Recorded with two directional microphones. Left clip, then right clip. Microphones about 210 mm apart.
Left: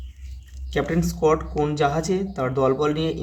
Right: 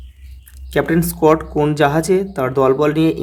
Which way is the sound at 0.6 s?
40° right (ahead or behind).